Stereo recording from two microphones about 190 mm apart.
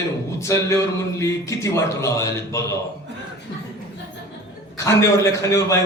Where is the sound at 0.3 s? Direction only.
15° left (ahead or behind).